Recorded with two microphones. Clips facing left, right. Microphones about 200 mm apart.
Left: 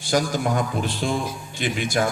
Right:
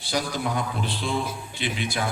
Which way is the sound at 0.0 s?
45° left (ahead or behind).